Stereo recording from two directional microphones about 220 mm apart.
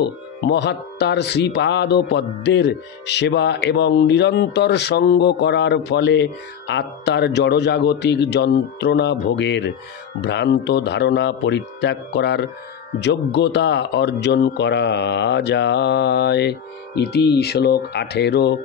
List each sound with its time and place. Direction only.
0.0 s speech: 50° left (ahead or behind)